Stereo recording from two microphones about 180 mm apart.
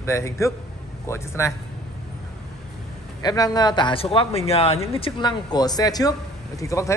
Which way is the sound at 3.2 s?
20° left (ahead or behind).